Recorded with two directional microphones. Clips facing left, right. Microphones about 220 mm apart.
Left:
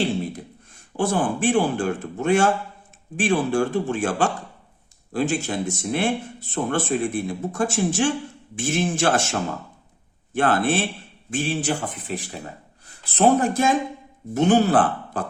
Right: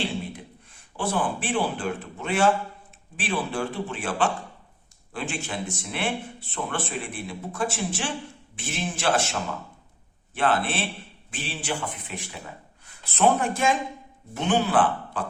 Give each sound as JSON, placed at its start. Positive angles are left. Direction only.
{"t": 0.3, "sound": "speech", "side_deg": 45}